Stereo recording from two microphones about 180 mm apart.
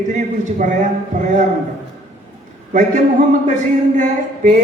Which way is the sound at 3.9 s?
45° right (ahead or behind).